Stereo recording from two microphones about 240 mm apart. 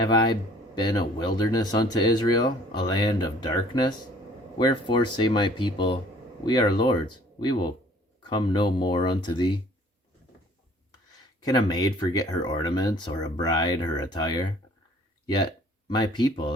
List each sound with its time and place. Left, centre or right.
0.0 s speech: centre
11.4 s speech: centre
15.9 s speech: centre